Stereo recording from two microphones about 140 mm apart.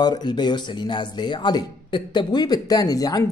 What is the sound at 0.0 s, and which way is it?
Speech, 30° left (ahead or behind).